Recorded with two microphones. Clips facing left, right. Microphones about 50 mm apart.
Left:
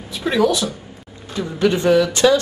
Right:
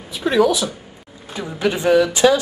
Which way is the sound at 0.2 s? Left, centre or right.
Centre.